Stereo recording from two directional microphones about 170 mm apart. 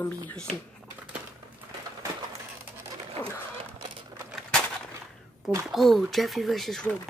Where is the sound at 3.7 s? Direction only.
20° right (ahead or behind).